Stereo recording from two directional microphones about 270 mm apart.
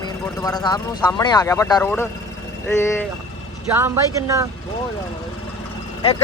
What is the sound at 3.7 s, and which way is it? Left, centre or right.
Speech, centre.